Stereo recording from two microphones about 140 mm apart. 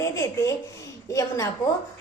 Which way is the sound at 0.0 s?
20° left (ahead or behind).